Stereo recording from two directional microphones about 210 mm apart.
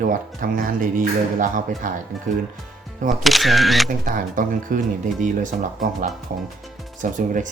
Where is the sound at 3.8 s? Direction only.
40° right (ahead or behind).